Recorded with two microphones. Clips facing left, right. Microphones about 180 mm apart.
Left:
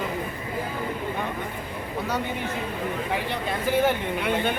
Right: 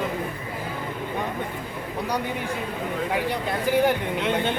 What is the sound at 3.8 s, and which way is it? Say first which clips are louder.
Speech: right 1 dB; 15° right (ahead or behind).